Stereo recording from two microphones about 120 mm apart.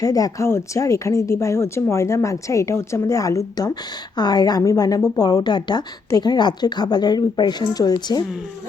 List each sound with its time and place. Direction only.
0.0 s a woman's voice: 30° left (ahead or behind)